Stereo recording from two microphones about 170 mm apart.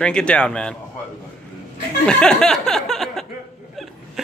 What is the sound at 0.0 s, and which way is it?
Speech, 5° left (ahead or behind).